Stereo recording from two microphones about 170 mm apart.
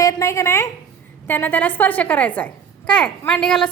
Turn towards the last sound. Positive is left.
turn(degrees=5)  # may be behind; listen again after turning